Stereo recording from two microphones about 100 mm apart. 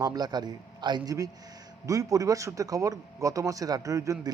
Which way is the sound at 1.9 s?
35° right (ahead or behind).